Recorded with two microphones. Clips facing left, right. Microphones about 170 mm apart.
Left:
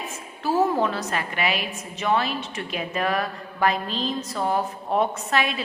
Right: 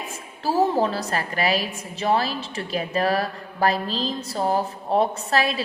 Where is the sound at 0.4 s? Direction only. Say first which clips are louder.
Right 1 dB; 35° right (ahead or behind).